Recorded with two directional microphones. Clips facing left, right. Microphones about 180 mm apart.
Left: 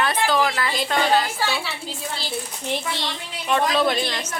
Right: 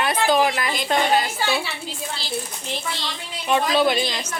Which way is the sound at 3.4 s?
5° right (ahead or behind).